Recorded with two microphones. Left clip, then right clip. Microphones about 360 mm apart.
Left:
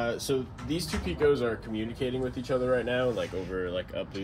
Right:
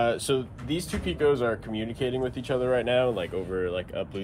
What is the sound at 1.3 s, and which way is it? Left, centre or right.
Speech, right.